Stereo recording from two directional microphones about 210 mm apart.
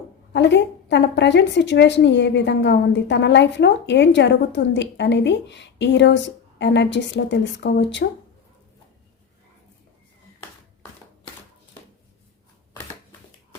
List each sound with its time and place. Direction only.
0.3 s a woman's voice: 55° left (ahead or behind)